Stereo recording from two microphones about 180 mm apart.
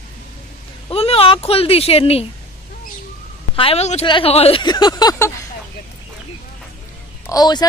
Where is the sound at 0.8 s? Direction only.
30° left (ahead or behind).